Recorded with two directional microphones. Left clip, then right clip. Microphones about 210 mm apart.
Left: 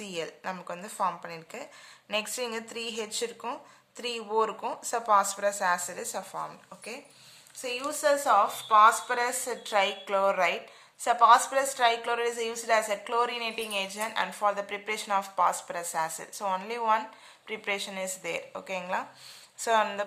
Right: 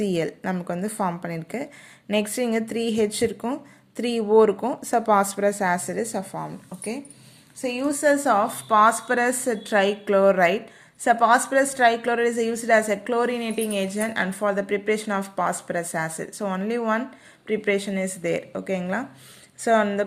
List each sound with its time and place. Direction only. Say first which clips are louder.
0.0 s a woman's voice: right 10 dB; 20° right (ahead or behind)